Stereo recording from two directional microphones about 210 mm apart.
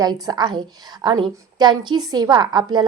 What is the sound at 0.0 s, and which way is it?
A woman's voice, 15° right (ahead or behind).